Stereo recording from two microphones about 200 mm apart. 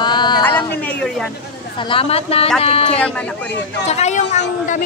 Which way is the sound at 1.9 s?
30° left (ahead or behind).